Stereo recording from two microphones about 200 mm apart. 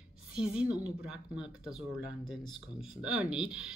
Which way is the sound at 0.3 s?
5° right (ahead or behind).